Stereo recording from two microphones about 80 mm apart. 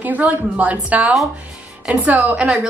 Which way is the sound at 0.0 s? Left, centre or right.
Centre.